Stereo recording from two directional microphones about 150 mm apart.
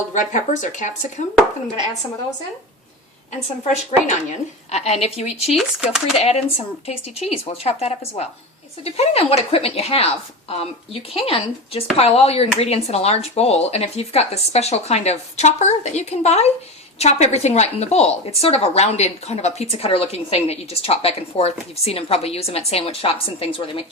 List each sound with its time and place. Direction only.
0.1 s speech: 55° left (ahead or behind)
3.6 s a woman's voice: 45° left (ahead or behind)
5.5 s speech: 5° right (ahead or behind)
6.1 s a woman's voice: 45° left (ahead or behind)
11.1 s a woman's voice: 40° left (ahead or behind)